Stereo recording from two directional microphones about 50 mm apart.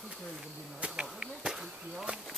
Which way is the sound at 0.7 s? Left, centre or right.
Right.